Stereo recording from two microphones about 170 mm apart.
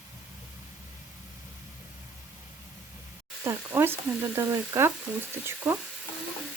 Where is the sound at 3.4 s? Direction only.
15° right (ahead or behind).